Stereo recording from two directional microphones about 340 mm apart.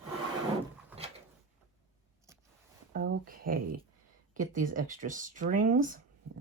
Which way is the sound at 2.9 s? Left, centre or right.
Right.